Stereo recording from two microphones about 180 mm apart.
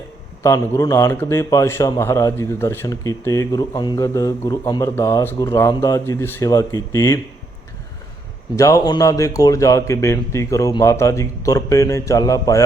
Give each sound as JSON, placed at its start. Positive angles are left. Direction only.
{"t": 0.4, "sound": "a man's voice", "side_deg": 15}
{"t": 8.5, "sound": "a man's voice", "side_deg": 20}